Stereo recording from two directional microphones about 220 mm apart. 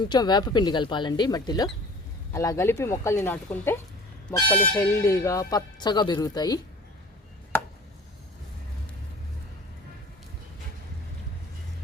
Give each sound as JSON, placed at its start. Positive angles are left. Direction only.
{"t": 0.1, "sound": "speech", "side_deg": 20}
{"t": 4.4, "sound": "speech", "side_deg": 30}
{"t": 4.8, "sound": "speech", "side_deg": 15}